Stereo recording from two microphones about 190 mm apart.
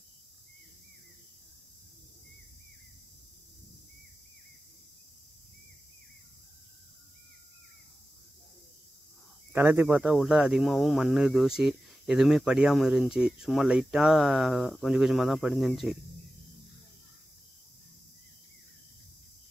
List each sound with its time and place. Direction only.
9.5 s speech: 10° right (ahead or behind)